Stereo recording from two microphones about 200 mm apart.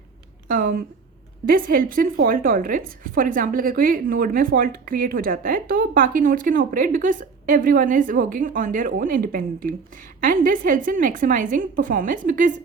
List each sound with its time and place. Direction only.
0.4 s a woman's voice: 45° right (ahead or behind)